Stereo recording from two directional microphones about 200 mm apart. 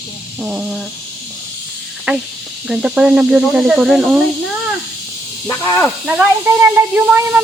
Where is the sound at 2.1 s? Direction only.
10° right (ahead or behind).